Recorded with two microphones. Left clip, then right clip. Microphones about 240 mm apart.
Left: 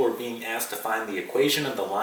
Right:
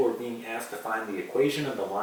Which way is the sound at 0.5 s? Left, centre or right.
Centre.